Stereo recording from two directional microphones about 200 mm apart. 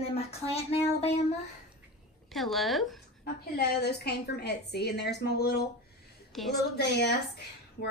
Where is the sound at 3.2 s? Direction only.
55° left (ahead or behind).